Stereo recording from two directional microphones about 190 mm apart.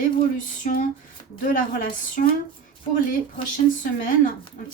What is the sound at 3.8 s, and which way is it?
Speech, 45° left (ahead or behind).